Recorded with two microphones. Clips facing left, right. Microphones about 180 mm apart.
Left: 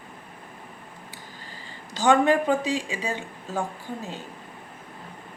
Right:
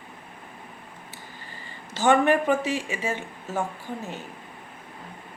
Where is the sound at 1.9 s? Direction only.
15° left (ahead or behind).